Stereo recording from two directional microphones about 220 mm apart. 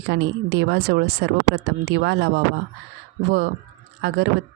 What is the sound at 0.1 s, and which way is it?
Speech, 55° right (ahead or behind).